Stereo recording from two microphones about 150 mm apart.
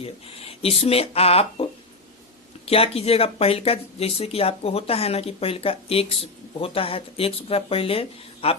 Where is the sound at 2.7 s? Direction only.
40° left (ahead or behind).